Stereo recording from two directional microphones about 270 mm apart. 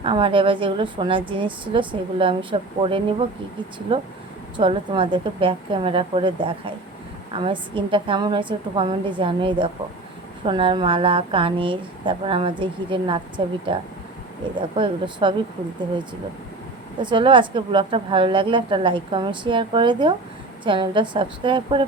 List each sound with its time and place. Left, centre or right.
0.0 s a woman's voice: centre
14.8 s a woman's voice: centre
17.0 s a woman's voice: centre